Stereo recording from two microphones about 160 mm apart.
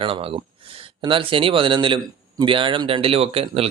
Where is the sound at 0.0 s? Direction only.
35° right (ahead or behind).